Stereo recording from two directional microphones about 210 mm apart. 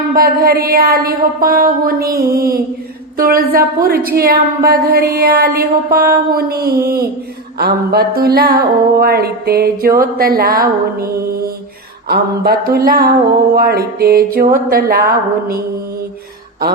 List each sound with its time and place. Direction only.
0.1 s a woman's voice: 45° right (ahead or behind)